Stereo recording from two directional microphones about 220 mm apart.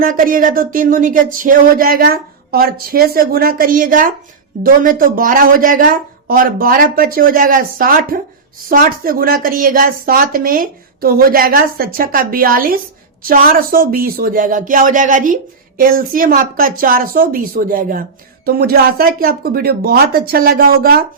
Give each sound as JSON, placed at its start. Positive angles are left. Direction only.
{"t": 0.0, "sound": "speech", "side_deg": -40}